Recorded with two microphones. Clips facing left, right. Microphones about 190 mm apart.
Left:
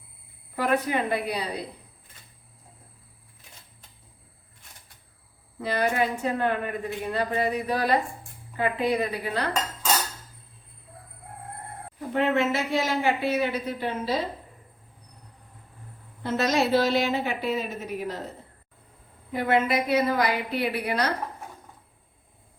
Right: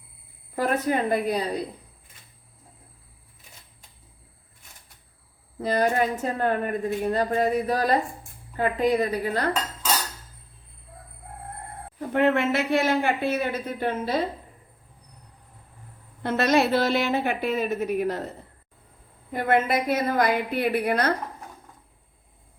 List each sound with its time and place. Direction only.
0.5 s speech: 40° right (ahead or behind)
5.6 s a woman's voice: 40° right (ahead or behind)
11.9 s speech: 55° right (ahead or behind)
16.2 s speech: 60° right (ahead or behind)
19.3 s speech: 50° right (ahead or behind)